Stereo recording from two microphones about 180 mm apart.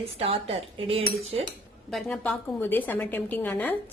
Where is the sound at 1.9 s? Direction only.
Centre (ahead or behind).